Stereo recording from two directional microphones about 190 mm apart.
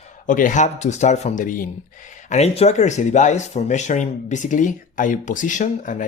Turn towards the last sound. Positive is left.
turn(degrees=40)  # may be behind; listen again after turning